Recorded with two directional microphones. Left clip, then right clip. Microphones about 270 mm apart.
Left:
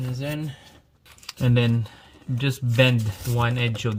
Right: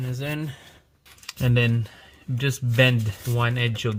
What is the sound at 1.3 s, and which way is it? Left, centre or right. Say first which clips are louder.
Speech: even; centre.